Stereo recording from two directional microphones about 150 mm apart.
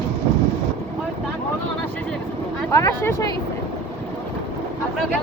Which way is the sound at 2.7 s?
20° left (ahead or behind).